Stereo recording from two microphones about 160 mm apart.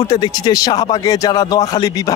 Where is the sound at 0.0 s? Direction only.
25° left (ahead or behind).